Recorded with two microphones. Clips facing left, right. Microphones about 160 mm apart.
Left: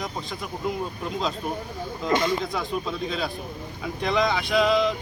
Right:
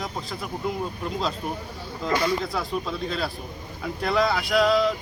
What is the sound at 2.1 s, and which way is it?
Speech, 20° left (ahead or behind).